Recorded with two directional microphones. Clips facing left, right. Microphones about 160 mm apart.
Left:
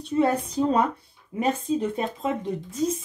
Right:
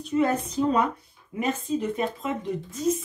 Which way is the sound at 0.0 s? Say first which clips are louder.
Left 1 dB; 35° left (ahead or behind).